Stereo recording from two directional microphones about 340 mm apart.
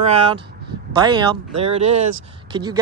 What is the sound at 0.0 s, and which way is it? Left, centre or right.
Speech, centre.